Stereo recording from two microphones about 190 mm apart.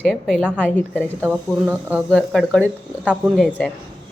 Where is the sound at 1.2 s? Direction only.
10° right (ahead or behind).